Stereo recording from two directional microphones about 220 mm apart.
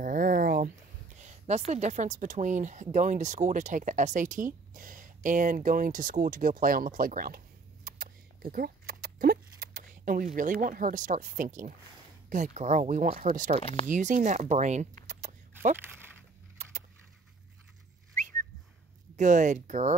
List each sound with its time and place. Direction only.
0.0 s a sound: 35° right (ahead or behind)
1.2 s speech: 30° right (ahead or behind)
13.6 s speech: 25° left (ahead or behind)
13.8 s speech: 35° right (ahead or behind)
19.1 s speech: 35° right (ahead or behind)